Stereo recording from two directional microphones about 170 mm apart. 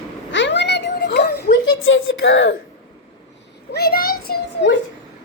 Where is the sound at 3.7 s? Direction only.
65° left (ahead or behind).